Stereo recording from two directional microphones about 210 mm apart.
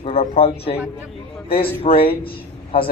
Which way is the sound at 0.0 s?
30° left (ahead or behind).